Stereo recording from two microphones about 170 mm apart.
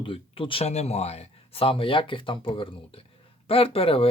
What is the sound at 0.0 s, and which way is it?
Speech, 30° left (ahead or behind).